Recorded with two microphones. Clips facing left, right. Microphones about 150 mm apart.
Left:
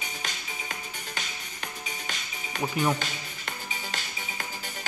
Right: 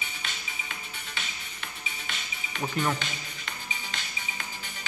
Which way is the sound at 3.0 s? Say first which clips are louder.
Left 2 dB; 40° left (ahead or behind).